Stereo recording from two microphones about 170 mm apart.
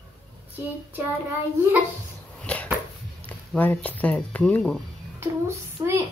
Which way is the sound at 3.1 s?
10° left (ahead or behind).